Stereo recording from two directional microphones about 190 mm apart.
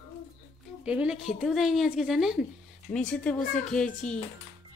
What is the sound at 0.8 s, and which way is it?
Speech, 5° right (ahead or behind).